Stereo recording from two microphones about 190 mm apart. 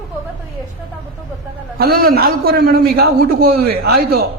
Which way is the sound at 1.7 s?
55° right (ahead or behind).